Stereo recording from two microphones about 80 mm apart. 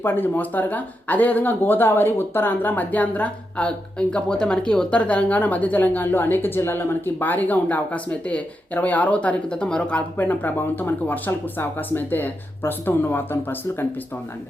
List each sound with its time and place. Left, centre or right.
0.0 s speech: left
10.2 s speech: left